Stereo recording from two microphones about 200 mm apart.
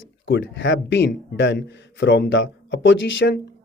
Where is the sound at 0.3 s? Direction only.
65° left (ahead or behind).